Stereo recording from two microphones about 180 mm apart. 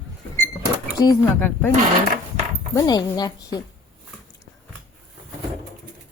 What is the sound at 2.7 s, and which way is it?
Speech, 20° left (ahead or behind).